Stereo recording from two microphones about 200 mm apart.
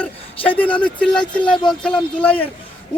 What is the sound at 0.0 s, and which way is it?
A man's voice, 5° left (ahead or behind).